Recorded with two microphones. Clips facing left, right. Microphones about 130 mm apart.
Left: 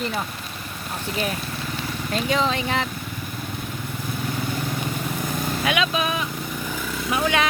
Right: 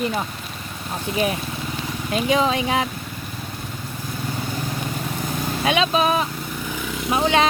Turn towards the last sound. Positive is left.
turn(degrees=-30)  # may be behind; listen again after turning